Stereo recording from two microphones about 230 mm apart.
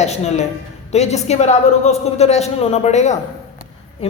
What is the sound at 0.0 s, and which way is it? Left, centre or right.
A woman's voice, left.